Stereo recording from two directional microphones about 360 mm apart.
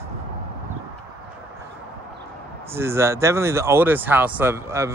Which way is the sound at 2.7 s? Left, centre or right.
Centre.